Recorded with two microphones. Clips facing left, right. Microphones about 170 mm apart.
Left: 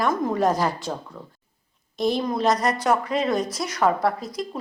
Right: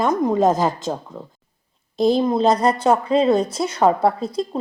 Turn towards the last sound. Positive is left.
turn(degrees=-30)  # may be behind; listen again after turning